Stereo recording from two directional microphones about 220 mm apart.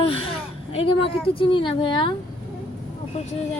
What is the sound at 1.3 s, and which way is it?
Speech, 25° left (ahead or behind).